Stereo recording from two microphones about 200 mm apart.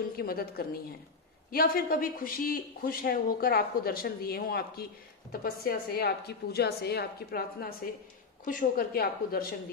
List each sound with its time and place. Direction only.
0.2 s a man's voice: 50° left (ahead or behind)